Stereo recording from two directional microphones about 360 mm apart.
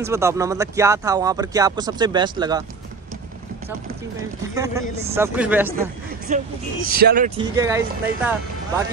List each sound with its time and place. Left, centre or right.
0.0 s speech: centre
5.0 s speech: centre
6.3 s speech: right
7.3 s speech: centre